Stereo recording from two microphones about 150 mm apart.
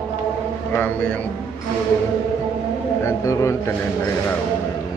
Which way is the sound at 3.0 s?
20° left (ahead or behind).